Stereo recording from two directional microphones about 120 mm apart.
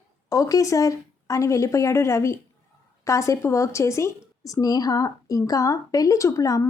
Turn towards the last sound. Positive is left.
turn(degrees=25)  # may be behind; listen again after turning